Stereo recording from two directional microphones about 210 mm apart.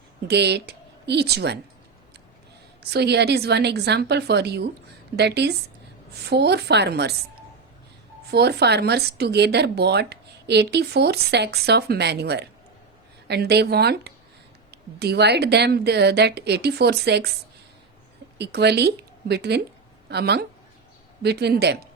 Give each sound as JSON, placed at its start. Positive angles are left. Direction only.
{"t": 0.3, "sound": "speech", "side_deg": -50}
{"t": 2.9, "sound": "speech", "side_deg": -50}
{"t": 8.3, "sound": "speech", "side_deg": -50}
{"t": 18.3, "sound": "a woman's voice", "side_deg": -50}